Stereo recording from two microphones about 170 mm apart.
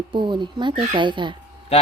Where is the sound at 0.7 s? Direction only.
50° right (ahead or behind).